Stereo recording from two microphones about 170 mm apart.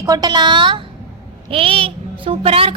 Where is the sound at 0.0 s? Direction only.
20° right (ahead or behind).